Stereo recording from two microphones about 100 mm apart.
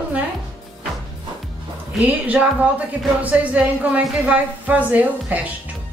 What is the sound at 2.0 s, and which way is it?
Speech, 15° right (ahead or behind).